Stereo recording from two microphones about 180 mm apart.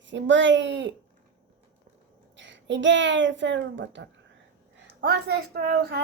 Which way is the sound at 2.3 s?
90° right.